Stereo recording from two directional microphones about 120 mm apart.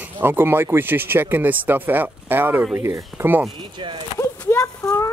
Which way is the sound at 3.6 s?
45° right (ahead or behind).